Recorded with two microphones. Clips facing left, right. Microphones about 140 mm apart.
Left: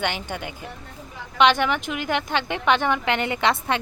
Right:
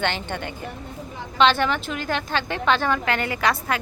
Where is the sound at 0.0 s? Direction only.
10° left (ahead or behind).